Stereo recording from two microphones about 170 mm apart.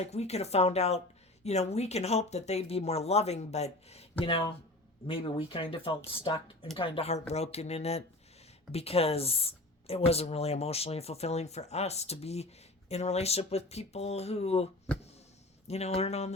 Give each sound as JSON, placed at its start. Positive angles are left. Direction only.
{"t": 0.0, "sound": "speech", "side_deg": 40}